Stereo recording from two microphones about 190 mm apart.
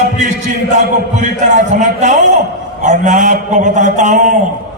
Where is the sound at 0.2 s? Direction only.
40° right (ahead or behind).